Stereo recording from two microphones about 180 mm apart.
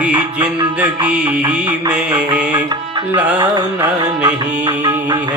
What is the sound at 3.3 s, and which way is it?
Music, 25° right (ahead or behind).